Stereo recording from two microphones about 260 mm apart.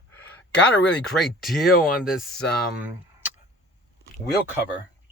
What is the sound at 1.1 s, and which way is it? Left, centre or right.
Speech, centre.